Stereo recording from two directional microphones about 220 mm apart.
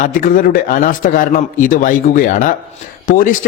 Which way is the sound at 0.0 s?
35° left (ahead or behind).